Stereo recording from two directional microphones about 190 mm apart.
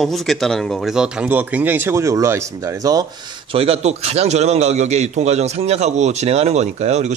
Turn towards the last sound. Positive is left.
turn(degrees=-35)  # may be behind; listen again after turning